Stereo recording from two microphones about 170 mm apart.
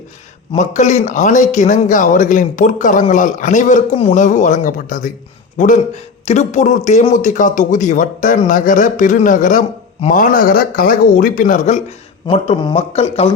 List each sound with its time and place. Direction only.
0.5 s speech: 45° left (ahead or behind)
12.3 s speech: 30° left (ahead or behind)